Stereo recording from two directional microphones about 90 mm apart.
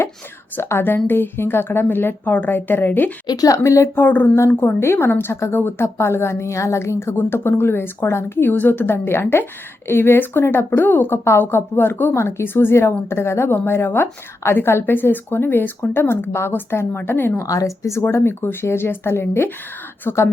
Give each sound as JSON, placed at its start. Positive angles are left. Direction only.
{"t": 0.5, "sound": "a woman's voice", "side_deg": 30}
{"t": 3.2, "sound": "a woman's voice", "side_deg": 40}
{"t": 4.0, "sound": "a woman's voice", "side_deg": 20}
{"t": 17.4, "sound": "a woman's voice", "side_deg": 40}
{"t": 18.0, "sound": "a woman's voice", "side_deg": 25}